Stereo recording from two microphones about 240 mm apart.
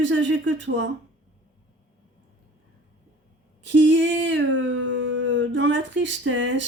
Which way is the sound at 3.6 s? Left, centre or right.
Right.